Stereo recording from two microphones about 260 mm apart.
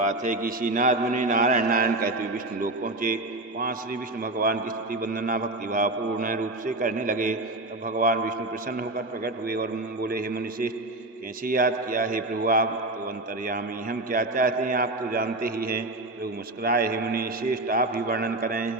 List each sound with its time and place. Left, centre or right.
0.0 s a man's voice: right
4.2 s a man's voice: right